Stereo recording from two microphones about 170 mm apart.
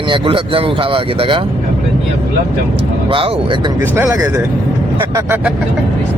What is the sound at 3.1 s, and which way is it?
Speech, 30° right (ahead or behind).